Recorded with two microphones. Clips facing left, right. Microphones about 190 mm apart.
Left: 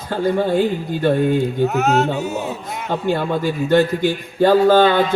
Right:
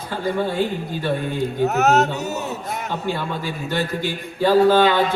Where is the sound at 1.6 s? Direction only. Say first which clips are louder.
Right 3 dB; 40° right (ahead or behind).